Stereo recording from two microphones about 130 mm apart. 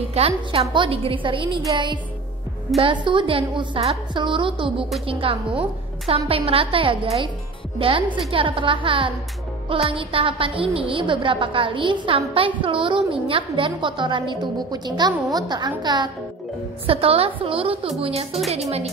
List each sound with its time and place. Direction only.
0.2 s a woman's voice: 55° right (ahead or behind)
0.5 s a woman's voice: 45° right (ahead or behind)
2.8 s a woman's voice: 40° right (ahead or behind)
8.3 s a woman's voice: 40° right (ahead or behind)
16.8 s a woman's voice: 45° right (ahead or behind)